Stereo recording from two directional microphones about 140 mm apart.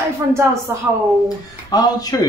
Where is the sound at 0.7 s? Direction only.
15° right (ahead or behind).